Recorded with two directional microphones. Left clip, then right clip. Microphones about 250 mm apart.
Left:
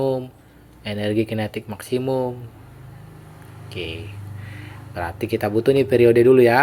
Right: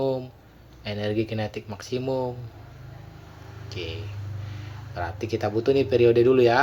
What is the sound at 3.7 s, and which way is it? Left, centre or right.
Speech, left.